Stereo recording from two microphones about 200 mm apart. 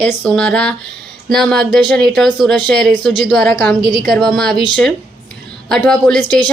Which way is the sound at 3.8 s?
20° right (ahead or behind).